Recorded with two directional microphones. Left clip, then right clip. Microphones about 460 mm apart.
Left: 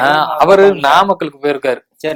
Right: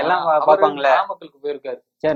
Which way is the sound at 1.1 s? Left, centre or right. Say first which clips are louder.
Left 12 dB; left.